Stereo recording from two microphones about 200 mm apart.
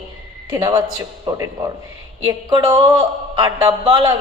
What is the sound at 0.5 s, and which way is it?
Speech, 20° right (ahead or behind).